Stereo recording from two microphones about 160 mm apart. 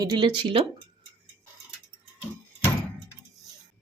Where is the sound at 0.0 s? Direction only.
25° right (ahead or behind).